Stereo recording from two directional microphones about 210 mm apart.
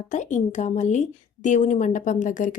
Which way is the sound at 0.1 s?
35° left (ahead or behind).